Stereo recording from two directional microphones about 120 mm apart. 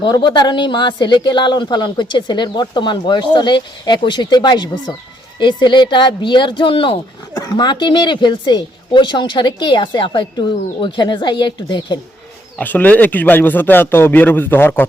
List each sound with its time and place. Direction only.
0.0 s speech: 40° left (ahead or behind)
7.3 s speech: 30° left (ahead or behind)
12.5 s a man's voice: 15° left (ahead or behind)